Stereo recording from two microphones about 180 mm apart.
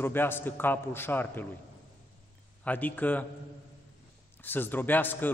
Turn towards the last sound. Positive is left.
turn(degrees=10)  # may be behind; listen again after turning